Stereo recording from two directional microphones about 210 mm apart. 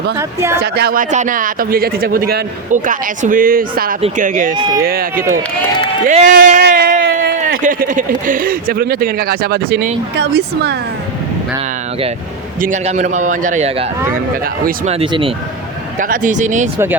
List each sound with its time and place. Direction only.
0.2 s speech: 15° right (ahead or behind)
0.6 s speech: 50° right (ahead or behind)
1.1 s a man's voice: 35° right (ahead or behind)
4.5 s speech: 20° right (ahead or behind)
4.9 s speech: 45° right (ahead or behind)
12.6 s a man's voice: 35° right (ahead or behind)
14.8 s speech: 25° right (ahead or behind)
16.0 s a man's voice: 40° right (ahead or behind)
16.7 s speech: 10° right (ahead or behind)